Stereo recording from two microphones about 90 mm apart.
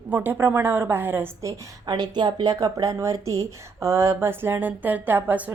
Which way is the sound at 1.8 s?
50° right (ahead or behind).